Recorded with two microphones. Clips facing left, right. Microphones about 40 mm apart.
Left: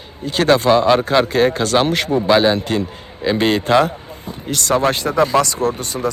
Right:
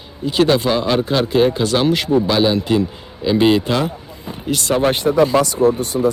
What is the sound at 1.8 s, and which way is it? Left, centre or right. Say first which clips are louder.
Speech: right 1 dB; left.